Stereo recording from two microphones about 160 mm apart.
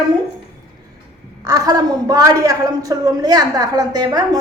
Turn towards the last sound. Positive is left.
turn(degrees=-25)  # may be behind; listen again after turning